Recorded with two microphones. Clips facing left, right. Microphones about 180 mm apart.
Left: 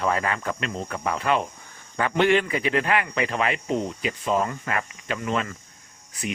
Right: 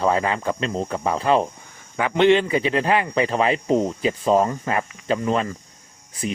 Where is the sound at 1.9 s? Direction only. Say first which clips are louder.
Right 4 dB; 15° right (ahead or behind).